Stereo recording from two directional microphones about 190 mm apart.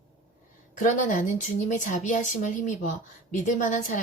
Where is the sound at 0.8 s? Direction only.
40° left (ahead or behind).